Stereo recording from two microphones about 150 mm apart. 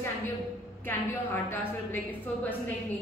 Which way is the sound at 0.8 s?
15° left (ahead or behind).